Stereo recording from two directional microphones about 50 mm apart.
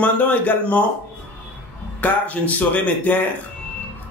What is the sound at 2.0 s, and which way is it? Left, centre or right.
Speech, left.